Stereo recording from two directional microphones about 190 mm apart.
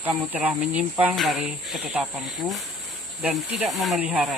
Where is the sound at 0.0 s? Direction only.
10° right (ahead or behind).